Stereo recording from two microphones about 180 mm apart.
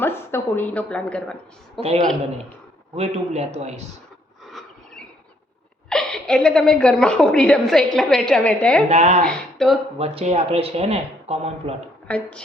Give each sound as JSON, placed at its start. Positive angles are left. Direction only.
{"t": 0.0, "sound": "a woman's voice", "side_deg": 15}
{"t": 1.8, "sound": "speech", "side_deg": -35}
{"t": 4.4, "sound": "a sound", "side_deg": 0}
{"t": 5.9, "sound": "a woman's voice", "side_deg": 5}
{"t": 8.9, "sound": "speech", "side_deg": -40}
{"t": 9.2, "sound": "speech", "side_deg": 5}
{"t": 10.0, "sound": "speech", "side_deg": -35}
{"t": 12.0, "sound": "a woman's voice", "side_deg": 5}